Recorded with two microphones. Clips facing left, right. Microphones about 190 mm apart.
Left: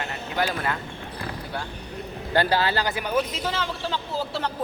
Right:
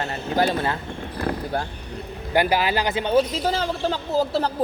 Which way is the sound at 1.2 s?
50° right (ahead or behind).